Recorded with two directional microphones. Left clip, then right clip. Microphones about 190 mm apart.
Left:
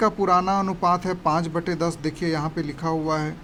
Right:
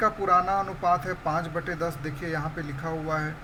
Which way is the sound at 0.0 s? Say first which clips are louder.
Left 3 dB; 45° left (ahead or behind).